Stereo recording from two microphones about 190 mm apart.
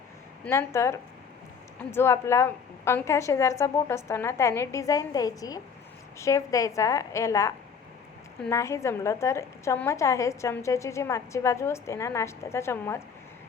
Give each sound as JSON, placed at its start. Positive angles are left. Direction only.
{"t": 0.4, "sound": "a woman's voice", "side_deg": 15}